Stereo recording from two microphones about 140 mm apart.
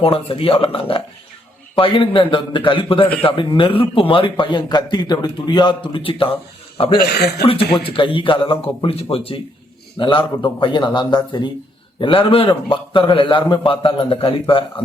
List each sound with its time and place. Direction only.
0.0 s a man's voice: 40° left (ahead or behind)